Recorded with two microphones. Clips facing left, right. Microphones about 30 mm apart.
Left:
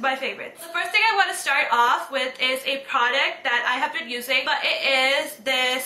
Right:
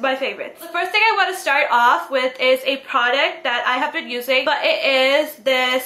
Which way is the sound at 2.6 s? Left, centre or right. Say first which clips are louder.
Right 4 dB; right.